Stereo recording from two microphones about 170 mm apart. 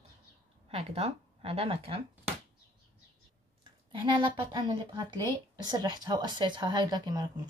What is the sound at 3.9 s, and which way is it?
Speech, 30° right (ahead or behind).